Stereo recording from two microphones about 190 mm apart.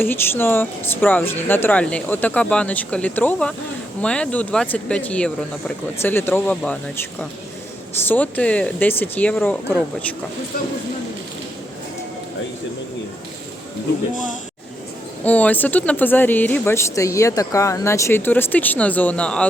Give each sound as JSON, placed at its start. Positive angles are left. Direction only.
{"t": 0.0, "sound": "speech", "side_deg": 10}
{"t": 15.2, "sound": "speech", "side_deg": 10}